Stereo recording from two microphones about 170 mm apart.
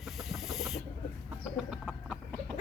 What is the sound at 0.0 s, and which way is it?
Chicken, centre (ahead or behind).